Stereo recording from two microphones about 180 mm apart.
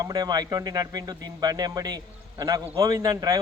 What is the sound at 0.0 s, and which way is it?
A man's voice, 20° right (ahead or behind).